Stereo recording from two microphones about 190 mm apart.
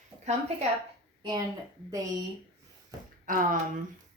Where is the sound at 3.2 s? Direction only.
45° right (ahead or behind).